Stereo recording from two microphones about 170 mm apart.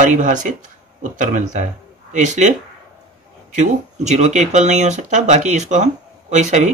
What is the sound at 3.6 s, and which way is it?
Speech, 45° right (ahead or behind).